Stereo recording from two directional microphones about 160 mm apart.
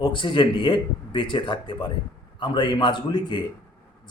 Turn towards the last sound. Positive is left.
turn(degrees=25)  # may be behind; listen again after turning